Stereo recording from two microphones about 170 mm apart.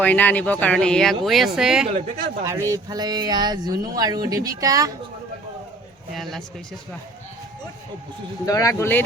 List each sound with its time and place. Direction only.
0.0 s speech: 10° left (ahead or behind)
2.4 s speech: 15° right (ahead or behind)
6.1 s speech: centre (ahead or behind)
8.4 s speech: 20° left (ahead or behind)